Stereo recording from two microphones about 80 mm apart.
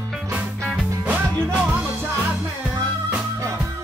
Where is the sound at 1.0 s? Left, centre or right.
Centre.